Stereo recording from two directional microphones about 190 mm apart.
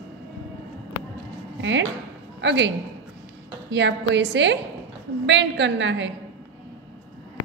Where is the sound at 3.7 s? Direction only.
65° right (ahead or behind).